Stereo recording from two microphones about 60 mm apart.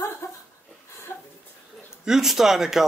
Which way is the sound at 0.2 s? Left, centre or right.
Left.